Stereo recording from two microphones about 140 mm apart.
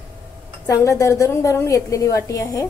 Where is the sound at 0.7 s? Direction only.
20° left (ahead or behind).